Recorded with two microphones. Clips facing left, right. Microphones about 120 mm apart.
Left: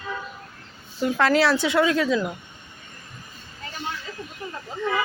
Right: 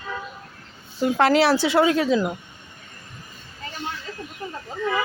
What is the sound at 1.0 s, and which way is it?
Speech, 25° right (ahead or behind).